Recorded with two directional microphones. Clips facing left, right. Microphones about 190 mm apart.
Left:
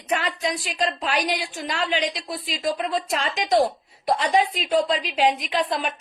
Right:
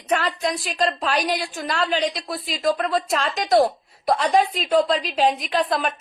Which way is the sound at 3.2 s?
40° right (ahead or behind).